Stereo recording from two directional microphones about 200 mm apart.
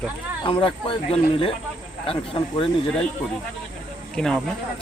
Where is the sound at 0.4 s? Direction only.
25° left (ahead or behind).